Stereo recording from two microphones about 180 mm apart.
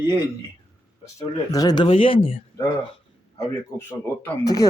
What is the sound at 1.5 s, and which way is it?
Speech, 20° left (ahead or behind).